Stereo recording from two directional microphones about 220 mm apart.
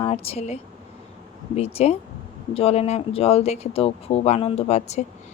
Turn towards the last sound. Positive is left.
turn(degrees=30)  # may be behind; listen again after turning